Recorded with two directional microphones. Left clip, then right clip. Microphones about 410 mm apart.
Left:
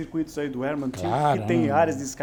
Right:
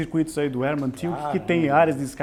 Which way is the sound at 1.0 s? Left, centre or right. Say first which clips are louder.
Left 8 dB; left.